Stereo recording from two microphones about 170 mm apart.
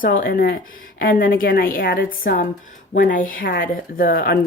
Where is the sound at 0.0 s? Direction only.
55° left (ahead or behind).